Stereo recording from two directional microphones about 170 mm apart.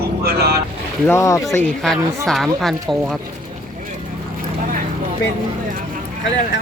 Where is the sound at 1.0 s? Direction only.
15° left (ahead or behind).